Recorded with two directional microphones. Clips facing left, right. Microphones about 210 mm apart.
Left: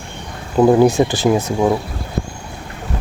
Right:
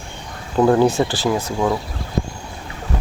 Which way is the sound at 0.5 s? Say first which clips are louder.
Left 3 dB; 15° left (ahead or behind).